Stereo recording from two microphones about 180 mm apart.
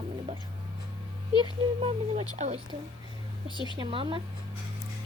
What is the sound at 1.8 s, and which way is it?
Speech, 35° right (ahead or behind).